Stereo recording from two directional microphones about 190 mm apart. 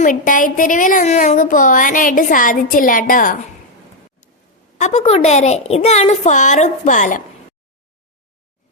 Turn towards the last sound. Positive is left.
turn(degrees=40)  # may be behind; listen again after turning